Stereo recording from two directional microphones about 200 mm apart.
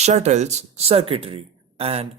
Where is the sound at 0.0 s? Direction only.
35° right (ahead or behind).